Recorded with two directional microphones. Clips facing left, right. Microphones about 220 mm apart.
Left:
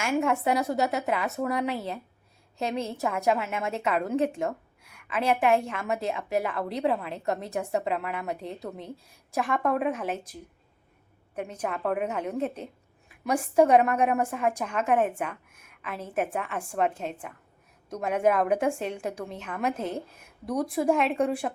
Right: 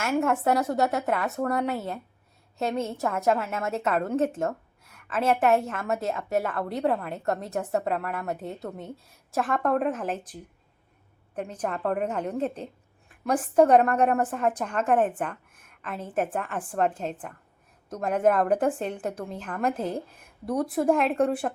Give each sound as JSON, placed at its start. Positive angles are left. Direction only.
{"t": 0.1, "sound": "a woman's voice", "side_deg": 0}
{"t": 4.8, "sound": "a sound", "side_deg": 10}
{"t": 5.2, "sound": "a woman's voice", "side_deg": 0}
{"t": 11.5, "sound": "a woman's voice", "side_deg": 10}